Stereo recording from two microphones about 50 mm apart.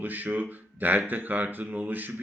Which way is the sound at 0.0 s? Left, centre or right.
Right.